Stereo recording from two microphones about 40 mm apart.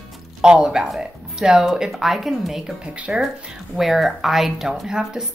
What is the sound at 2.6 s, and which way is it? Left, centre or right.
Speech, right.